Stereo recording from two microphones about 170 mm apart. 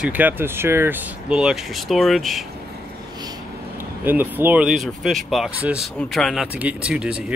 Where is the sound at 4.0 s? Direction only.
10° right (ahead or behind).